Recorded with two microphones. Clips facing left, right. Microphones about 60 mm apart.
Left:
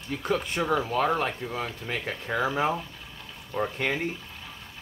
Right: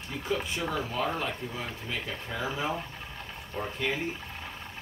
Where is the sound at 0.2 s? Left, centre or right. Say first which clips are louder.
Left 3 dB; left.